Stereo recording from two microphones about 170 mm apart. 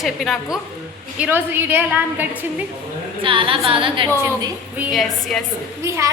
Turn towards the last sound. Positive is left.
turn(degrees=-15)  # may be behind; listen again after turning